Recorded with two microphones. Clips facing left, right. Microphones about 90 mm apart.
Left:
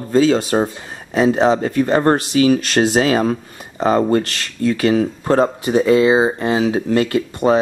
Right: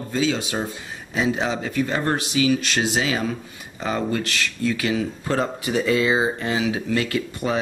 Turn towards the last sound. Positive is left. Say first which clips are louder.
# left 9 dB
turn(degrees=35)  # may be behind; listen again after turning